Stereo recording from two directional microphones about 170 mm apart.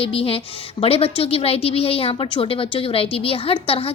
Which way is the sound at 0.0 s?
35° left (ahead or behind).